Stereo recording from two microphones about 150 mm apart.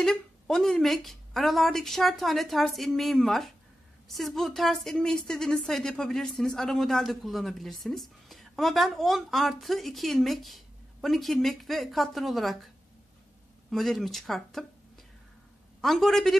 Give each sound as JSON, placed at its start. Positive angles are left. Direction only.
{"t": 0.0, "sound": "a woman's voice", "side_deg": 0}